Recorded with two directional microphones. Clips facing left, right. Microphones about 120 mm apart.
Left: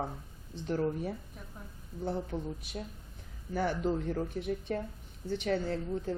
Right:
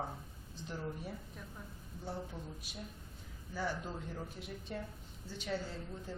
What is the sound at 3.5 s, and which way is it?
A woman's voice, 60° left (ahead or behind).